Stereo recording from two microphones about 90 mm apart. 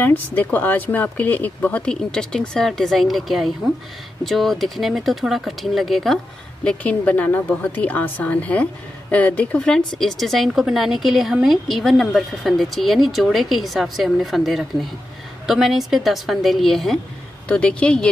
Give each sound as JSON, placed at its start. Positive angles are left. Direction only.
{"t": 0.0, "sound": "a woman's voice", "side_deg": 20}
{"t": 6.6, "sound": "speech", "side_deg": 10}
{"t": 9.9, "sound": "a woman's voice", "side_deg": 0}
{"t": 17.5, "sound": "speech", "side_deg": 15}